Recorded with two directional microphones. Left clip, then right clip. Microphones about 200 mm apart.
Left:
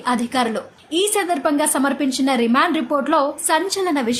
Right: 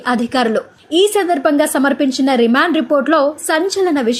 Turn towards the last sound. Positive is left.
turn(degrees=-20)  # may be behind; listen again after turning